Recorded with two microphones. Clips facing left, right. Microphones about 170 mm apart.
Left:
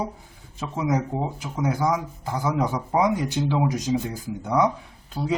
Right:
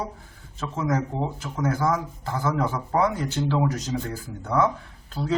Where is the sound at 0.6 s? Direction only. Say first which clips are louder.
Left 1 dB; 10° left (ahead or behind).